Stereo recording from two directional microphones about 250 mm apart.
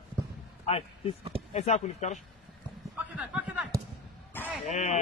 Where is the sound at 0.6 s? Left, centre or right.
Left.